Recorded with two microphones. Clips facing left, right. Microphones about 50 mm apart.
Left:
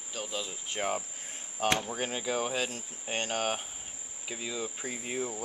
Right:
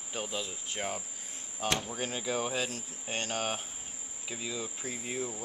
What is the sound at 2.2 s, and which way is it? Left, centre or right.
Cricket, centre.